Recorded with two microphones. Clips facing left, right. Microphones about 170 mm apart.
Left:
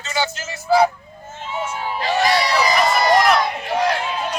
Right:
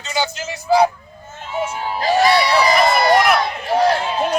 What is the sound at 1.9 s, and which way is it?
Crowd, 40° right (ahead or behind).